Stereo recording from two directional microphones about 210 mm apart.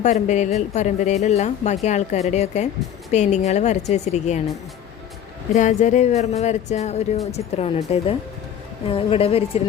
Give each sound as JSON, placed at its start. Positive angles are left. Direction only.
{"t": 0.0, "sound": "a woman's voice", "side_deg": 35}
{"t": 5.5, "sound": "a woman's voice", "side_deg": 35}